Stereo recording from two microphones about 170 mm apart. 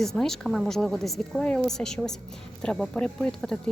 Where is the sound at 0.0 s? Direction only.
Centre (ahead or behind).